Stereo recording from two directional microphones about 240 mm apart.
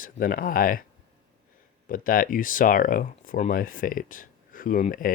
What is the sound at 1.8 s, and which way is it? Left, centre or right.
Speech, left.